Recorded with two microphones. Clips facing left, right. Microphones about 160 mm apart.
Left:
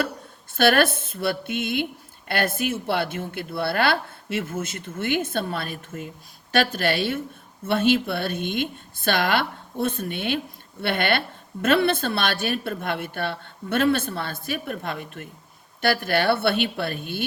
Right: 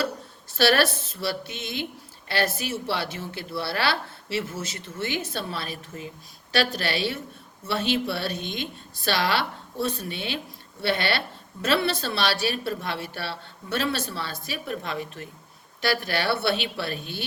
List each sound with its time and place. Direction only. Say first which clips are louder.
0.5 s speech: left 2 dB; 50° left (ahead or behind)